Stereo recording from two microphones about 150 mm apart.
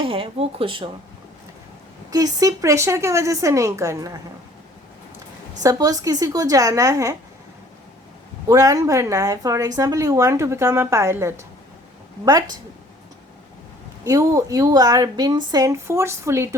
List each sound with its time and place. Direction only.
0.0 s speech: 35° right (ahead or behind)
2.0 s speech: 25° right (ahead or behind)
5.6 s speech: 25° right (ahead or behind)
8.4 s speech: 20° right (ahead or behind)
14.0 s speech: 20° right (ahead or behind)